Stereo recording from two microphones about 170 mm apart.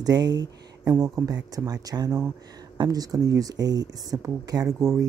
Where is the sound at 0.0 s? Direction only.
25° right (ahead or behind).